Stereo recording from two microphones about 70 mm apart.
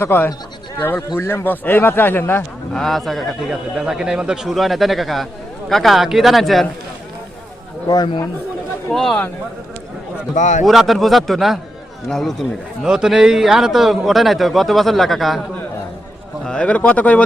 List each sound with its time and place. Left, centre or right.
0.0 s speech: left
1.5 s speech: left
2.7 s speech: centre
3.5 s speech: centre
7.9 s speech: left
8.9 s speech: centre
10.7 s speech: centre
12.8 s speech: centre
16.4 s speech: centre